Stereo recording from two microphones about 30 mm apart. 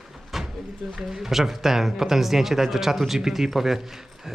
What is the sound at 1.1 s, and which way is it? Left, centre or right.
Speech, centre.